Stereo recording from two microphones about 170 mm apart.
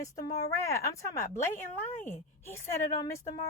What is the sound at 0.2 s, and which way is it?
Speech, 20° left (ahead or behind).